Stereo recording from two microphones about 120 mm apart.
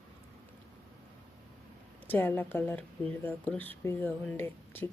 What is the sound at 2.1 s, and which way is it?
Speech, 15° left (ahead or behind).